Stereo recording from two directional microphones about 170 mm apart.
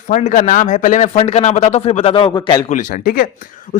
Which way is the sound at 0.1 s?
50° left (ahead or behind).